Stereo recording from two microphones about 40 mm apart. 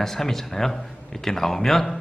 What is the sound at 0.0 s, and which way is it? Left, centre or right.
Speech, centre.